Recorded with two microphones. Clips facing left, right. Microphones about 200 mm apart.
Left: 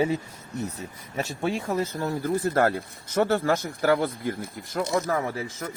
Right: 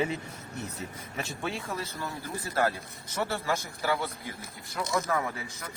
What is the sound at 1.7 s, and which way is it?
Speech, 45° left (ahead or behind).